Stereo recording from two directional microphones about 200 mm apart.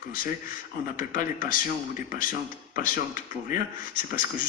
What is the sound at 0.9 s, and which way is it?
Speech, 40° left (ahead or behind).